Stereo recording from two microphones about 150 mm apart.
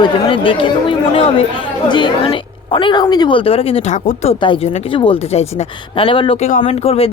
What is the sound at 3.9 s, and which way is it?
Speech, 55° left (ahead or behind).